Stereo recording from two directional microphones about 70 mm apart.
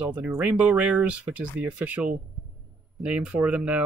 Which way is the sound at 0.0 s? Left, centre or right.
Right.